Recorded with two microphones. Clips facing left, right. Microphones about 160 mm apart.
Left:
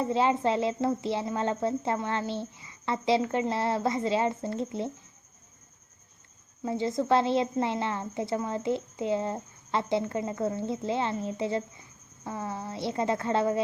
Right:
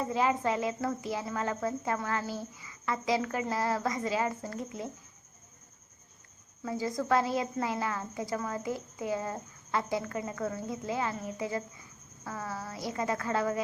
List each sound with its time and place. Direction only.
0.0 s a woman's voice: 30° left (ahead or behind)
6.6 s a woman's voice: 25° left (ahead or behind)